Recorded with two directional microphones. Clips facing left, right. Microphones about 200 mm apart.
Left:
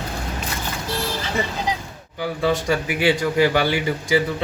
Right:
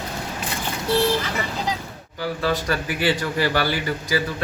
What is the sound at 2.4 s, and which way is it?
Speech, 15° left (ahead or behind).